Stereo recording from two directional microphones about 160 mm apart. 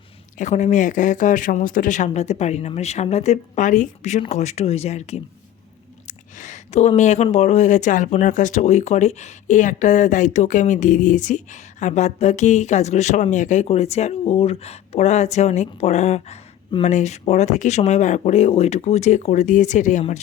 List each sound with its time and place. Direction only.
0.3 s speech: 50° left (ahead or behind)